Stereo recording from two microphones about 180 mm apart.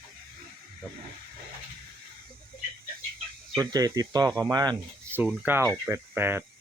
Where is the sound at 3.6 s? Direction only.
20° right (ahead or behind).